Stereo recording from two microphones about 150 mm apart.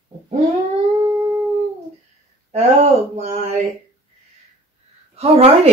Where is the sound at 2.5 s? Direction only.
50° right (ahead or behind).